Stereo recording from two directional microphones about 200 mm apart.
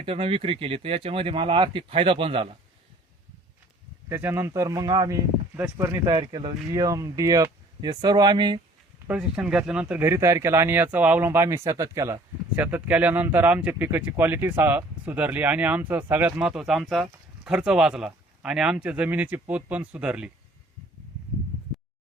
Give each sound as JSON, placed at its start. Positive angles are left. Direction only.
{"t": 0.0, "sound": "speech", "side_deg": -30}
{"t": 4.1, "sound": "speech", "side_deg": -10}
{"t": 9.0, "sound": "speech", "side_deg": -5}